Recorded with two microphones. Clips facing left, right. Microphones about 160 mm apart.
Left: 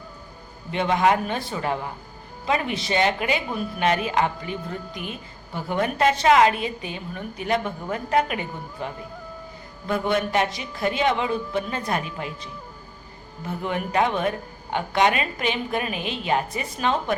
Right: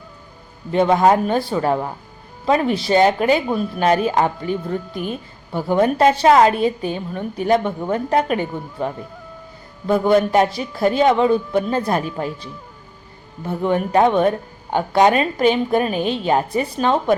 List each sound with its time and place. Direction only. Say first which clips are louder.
0.7 s a woman's voice: right 6 dB; 40° right (ahead or behind)
13.7 s a woman's voice: right 7 dB; 35° right (ahead or behind)